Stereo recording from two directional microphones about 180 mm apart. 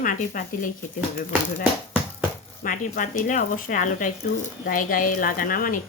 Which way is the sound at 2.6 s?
45° left (ahead or behind).